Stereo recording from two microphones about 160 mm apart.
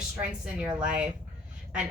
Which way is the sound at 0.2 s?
5° right (ahead or behind).